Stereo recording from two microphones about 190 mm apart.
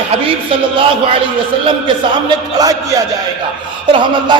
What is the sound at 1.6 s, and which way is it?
A man's voice, 25° right (ahead or behind).